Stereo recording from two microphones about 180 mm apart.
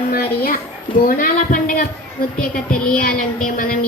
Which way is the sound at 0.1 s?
55° left (ahead or behind).